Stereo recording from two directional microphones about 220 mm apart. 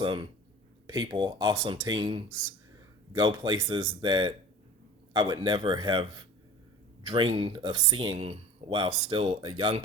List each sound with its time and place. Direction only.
0.0 s speech: 20° right (ahead or behind)